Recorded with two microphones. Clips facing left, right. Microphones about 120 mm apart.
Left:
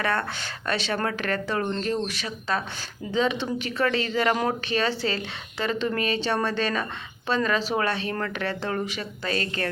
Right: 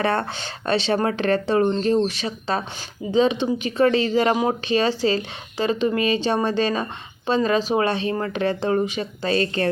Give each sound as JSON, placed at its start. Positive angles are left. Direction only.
{"t": 0.0, "sound": "speech", "side_deg": -25}